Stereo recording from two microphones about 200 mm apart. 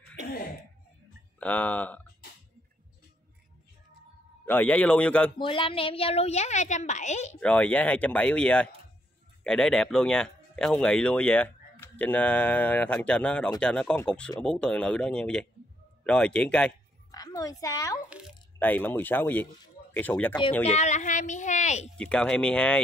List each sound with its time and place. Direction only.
1.4 s speech: 5° left (ahead or behind)
4.5 s speech: 10° left (ahead or behind)
5.4 s a woman's voice: 25° left (ahead or behind)
7.3 s speech: 5° left (ahead or behind)
17.1 s a woman's voice: 20° left (ahead or behind)
20.6 s a woman's voice: 35° left (ahead or behind)
21.9 s speech: 5° left (ahead or behind)